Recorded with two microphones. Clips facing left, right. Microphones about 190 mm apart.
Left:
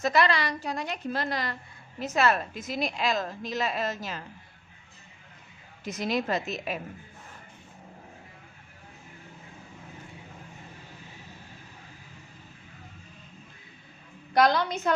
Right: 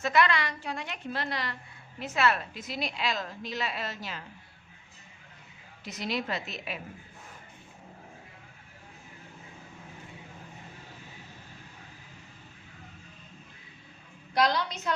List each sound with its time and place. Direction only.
0.0 s a woman's voice: 35° left (ahead or behind)
5.8 s a woman's voice: 45° left (ahead or behind)
14.3 s a woman's voice: 50° left (ahead or behind)